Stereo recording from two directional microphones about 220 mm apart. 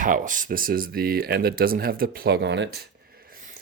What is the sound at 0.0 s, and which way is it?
Speech, 35° right (ahead or behind).